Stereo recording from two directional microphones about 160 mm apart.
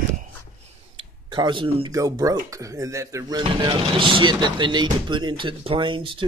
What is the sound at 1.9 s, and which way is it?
Speech, 20° right (ahead or behind).